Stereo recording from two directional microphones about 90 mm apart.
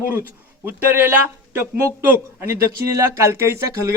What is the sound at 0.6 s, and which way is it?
A man's voice, 25° right (ahead or behind).